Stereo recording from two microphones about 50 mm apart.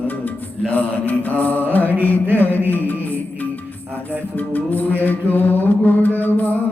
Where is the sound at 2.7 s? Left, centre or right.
Left.